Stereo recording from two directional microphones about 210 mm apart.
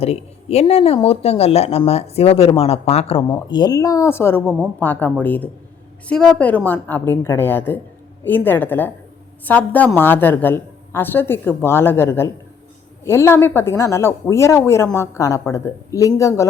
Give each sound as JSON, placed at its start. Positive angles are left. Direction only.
{"t": 0.0, "sound": "a woman's voice", "side_deg": 30}